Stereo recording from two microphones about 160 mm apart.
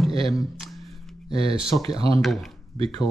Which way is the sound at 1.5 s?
35° right (ahead or behind).